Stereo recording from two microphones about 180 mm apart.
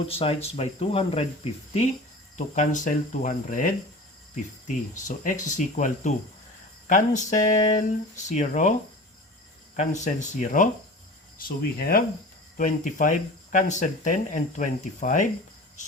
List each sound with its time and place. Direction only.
0.2 s speech: 35° left (ahead or behind)
2.6 s speech: 45° left (ahead or behind)
5.0 s speech: 45° left (ahead or behind)
9.7 s speech: 40° left (ahead or behind)